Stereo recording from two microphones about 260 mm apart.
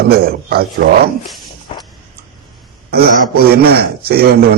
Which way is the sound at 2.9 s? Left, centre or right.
Right.